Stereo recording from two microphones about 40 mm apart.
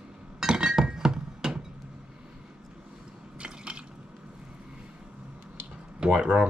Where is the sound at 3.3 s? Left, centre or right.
Right.